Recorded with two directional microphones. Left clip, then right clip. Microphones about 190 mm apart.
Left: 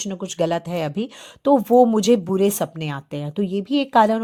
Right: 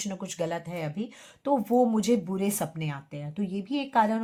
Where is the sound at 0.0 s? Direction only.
30° left (ahead or behind).